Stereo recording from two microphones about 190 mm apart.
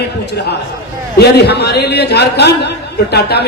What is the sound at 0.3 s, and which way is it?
A man's voice, 60° left (ahead or behind).